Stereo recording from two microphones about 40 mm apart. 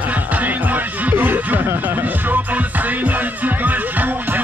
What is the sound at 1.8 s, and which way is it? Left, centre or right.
Music, right.